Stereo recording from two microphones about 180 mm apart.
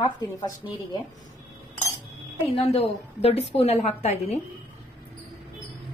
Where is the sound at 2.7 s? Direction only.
35° left (ahead or behind).